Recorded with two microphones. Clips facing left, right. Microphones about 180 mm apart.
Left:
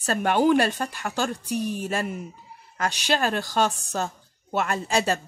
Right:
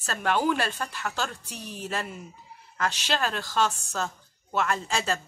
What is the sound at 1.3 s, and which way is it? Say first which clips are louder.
Speech: left 13 dB; 15° left (ahead or behind).